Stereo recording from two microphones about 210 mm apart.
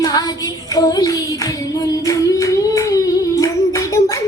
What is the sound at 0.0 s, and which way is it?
Child singing, 20° left (ahead or behind).